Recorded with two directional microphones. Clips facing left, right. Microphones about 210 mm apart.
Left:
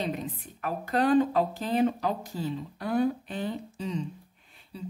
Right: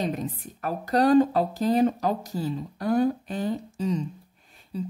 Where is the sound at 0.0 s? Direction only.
45° right (ahead or behind).